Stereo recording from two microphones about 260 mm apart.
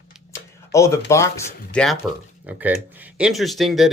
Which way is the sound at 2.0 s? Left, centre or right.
Centre.